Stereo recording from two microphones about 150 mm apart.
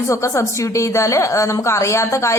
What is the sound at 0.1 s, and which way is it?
A woman's voice, 20° left (ahead or behind).